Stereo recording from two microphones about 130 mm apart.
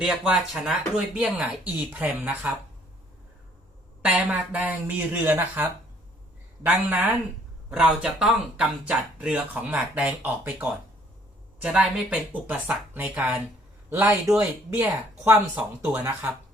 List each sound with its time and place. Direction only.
0.0 s speech: 5° right (ahead or behind)
4.0 s speech: 10° right (ahead or behind)